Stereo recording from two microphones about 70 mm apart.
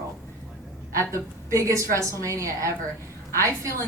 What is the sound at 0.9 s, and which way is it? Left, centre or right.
A woman's voice, right.